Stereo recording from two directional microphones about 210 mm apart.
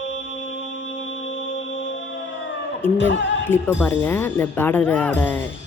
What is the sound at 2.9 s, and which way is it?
Music, 60° left (ahead or behind).